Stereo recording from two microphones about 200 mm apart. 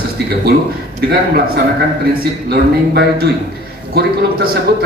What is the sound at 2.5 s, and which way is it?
A man's voice, 50° right (ahead or behind).